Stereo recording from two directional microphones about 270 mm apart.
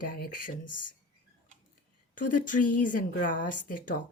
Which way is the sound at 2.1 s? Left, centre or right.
Left.